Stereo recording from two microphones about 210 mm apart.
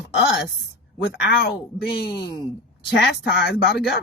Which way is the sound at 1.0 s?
50° left (ahead or behind).